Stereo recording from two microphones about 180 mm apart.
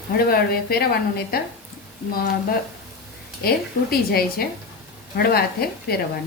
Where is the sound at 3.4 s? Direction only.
55° left (ahead or behind).